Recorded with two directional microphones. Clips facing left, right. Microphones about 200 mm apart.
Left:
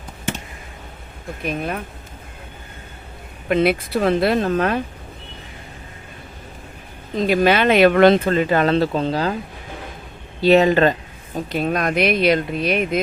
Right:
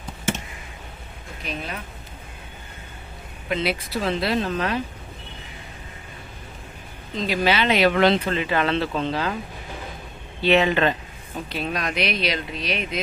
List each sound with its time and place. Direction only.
1.4 s speech: 50° left (ahead or behind)
3.5 s speech: 55° left (ahead or behind)
7.2 s speech: 50° left (ahead or behind)
10.4 s speech: 40° left (ahead or behind)